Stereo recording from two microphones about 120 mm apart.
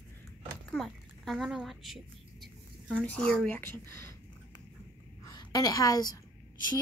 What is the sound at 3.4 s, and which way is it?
Speech, 15° left (ahead or behind).